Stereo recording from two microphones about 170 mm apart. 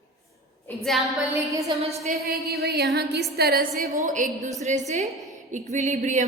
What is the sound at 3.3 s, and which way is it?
A woman's voice, 65° right (ahead or behind).